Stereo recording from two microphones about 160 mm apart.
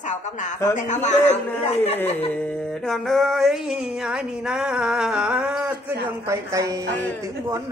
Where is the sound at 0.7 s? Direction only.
50° left (ahead or behind).